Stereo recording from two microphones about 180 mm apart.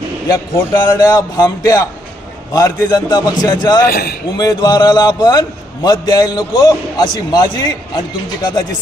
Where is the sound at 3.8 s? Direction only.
60° left (ahead or behind).